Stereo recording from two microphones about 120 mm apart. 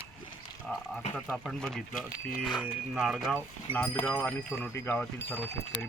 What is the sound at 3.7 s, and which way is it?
Speech, 15° left (ahead or behind).